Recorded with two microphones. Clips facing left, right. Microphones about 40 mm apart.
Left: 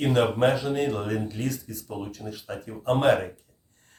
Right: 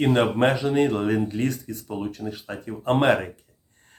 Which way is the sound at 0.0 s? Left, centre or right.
Right.